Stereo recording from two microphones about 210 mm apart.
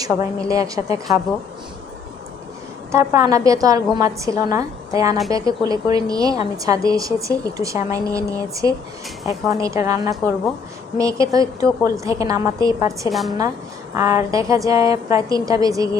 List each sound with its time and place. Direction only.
0.0 s a woman's voice: 15° right (ahead or behind)
2.9 s a woman's voice: 15° right (ahead or behind)
13.1 s a woman's voice: centre (ahead or behind)
13.9 s a woman's voice: 15° right (ahead or behind)